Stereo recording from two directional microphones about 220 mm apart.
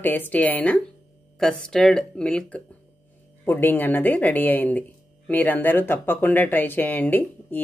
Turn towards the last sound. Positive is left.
turn(degrees=10)  # may be behind; listen again after turning